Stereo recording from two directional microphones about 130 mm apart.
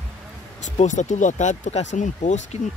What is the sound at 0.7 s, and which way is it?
Speech, 70° left (ahead or behind).